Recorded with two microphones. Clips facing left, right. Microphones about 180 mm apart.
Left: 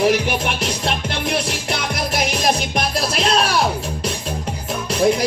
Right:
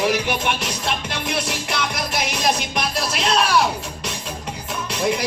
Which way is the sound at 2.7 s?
35° left (ahead or behind).